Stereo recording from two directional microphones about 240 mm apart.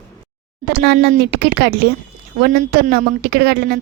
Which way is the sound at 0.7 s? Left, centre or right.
Right.